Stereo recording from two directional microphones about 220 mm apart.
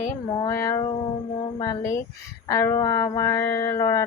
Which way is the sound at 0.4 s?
15° left (ahead or behind).